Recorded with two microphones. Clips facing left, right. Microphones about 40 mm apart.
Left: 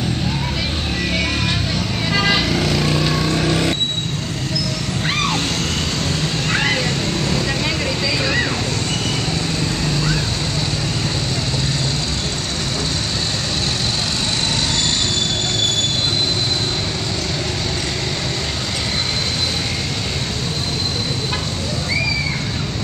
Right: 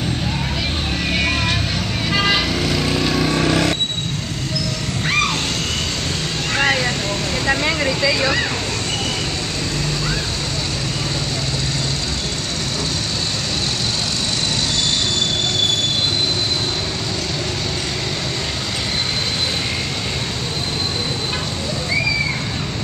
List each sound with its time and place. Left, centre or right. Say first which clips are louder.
2.0 s vehicle: even; centre
3.3 s vehicle: right 1 dB; centre
7.7 s vehicle: right 2 dB; right